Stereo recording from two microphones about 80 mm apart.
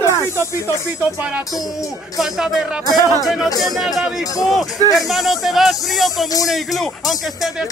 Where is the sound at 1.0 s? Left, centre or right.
Centre.